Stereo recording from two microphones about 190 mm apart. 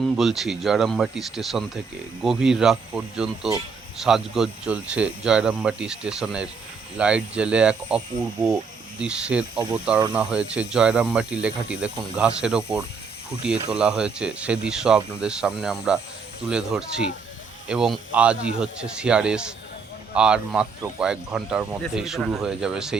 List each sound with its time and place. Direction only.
0.0 s speech: centre (ahead or behind)
9.6 s speech: 25° right (ahead or behind)
10.2 s speech: 5° right (ahead or behind)